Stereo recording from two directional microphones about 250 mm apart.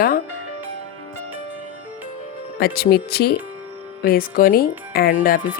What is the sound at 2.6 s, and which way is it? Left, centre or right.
Speech, left.